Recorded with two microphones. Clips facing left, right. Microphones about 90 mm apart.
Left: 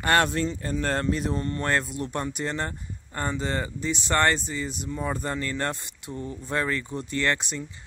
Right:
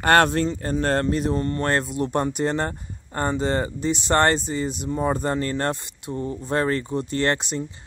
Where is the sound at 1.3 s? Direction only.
40° right (ahead or behind).